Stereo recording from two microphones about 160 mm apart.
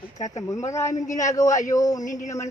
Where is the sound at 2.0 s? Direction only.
50° left (ahead or behind).